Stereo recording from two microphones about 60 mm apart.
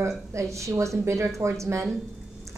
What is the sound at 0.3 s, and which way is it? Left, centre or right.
A woman's voice, right.